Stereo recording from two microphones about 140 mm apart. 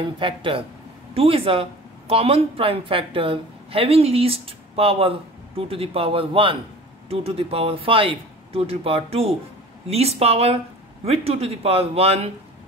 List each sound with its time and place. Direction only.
0.0 s speech: 35° right (ahead or behind)